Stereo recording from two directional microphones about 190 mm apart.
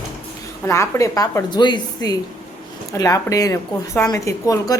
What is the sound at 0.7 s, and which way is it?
A woman's voice, 15° left (ahead or behind).